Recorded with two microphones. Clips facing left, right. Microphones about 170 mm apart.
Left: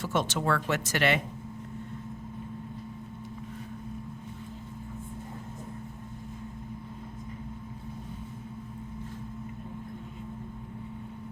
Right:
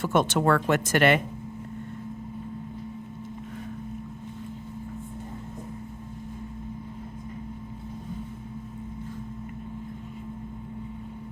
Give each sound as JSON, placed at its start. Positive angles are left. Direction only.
{"t": 0.0, "sound": "speech", "side_deg": -55}